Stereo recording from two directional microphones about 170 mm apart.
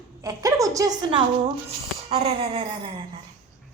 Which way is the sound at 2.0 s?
35° right (ahead or behind).